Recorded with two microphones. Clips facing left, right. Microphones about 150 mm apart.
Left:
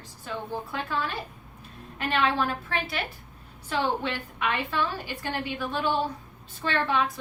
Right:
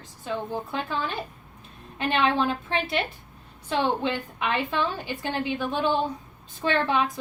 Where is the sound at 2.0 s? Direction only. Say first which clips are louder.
Right 2 dB; 20° right (ahead or behind).